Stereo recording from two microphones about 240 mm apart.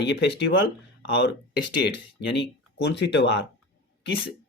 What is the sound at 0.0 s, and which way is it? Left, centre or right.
Speech, left.